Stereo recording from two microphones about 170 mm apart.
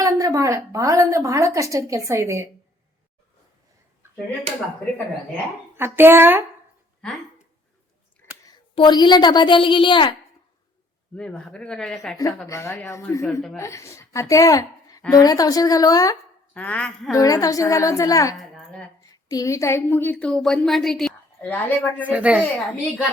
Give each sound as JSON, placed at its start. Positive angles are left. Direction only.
{"t": 0.0, "sound": "a woman's voice", "side_deg": -20}
{"t": 5.7, "sound": "speech", "side_deg": -15}
{"t": 8.7, "sound": "a woman's voice", "side_deg": 25}
{"t": 11.1, "sound": "speech", "side_deg": 5}
{"t": 12.5, "sound": "a woman's voice", "side_deg": 15}
{"t": 16.6, "sound": "a woman's voice", "side_deg": 5}
{"t": 17.1, "sound": "a woman's voice", "side_deg": 20}
{"t": 18.3, "sound": "a sound", "side_deg": 0}
{"t": 19.3, "sound": "a woman's voice", "side_deg": 20}
{"t": 22.1, "sound": "speech", "side_deg": -5}